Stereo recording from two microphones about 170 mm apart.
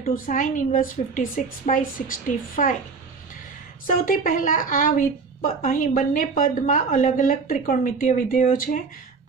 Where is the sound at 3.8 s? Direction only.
55° left (ahead or behind).